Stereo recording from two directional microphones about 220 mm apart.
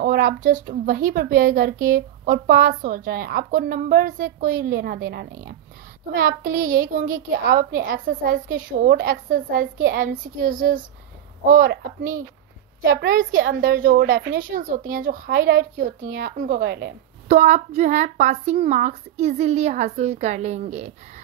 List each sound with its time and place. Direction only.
0.0 s a woman's voice: 40° right (ahead or behind)
12.8 s a woman's voice: 45° right (ahead or behind)
13.9 s a woman's voice: 55° right (ahead or behind)
14.5 s a woman's voice: 40° right (ahead or behind)
17.3 s a woman's voice: 30° right (ahead or behind)